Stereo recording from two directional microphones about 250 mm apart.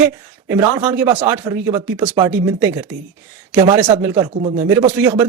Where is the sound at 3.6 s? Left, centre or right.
Centre.